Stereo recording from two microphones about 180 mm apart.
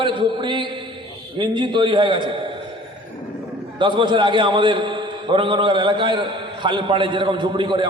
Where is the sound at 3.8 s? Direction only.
25° right (ahead or behind).